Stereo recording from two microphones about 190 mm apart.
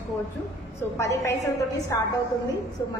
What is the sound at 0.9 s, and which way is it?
A woman's voice, 15° left (ahead or behind).